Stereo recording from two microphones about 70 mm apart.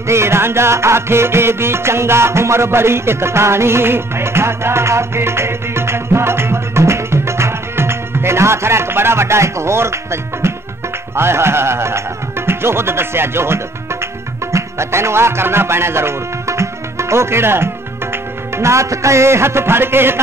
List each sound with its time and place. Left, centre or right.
0.0 s music: right
11.1 s music: right